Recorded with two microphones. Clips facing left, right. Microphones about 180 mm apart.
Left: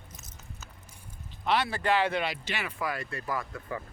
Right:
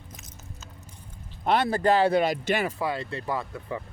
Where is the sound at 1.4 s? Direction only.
45° right (ahead or behind).